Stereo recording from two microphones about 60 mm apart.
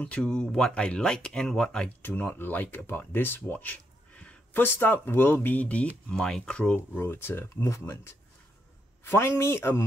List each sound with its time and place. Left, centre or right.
0.0 s speech: centre
2.0 s speech: left
4.6 s speech: left
5.6 s speech: left
6.1 s speech: centre
7.0 s speech: left
7.6 s speech: left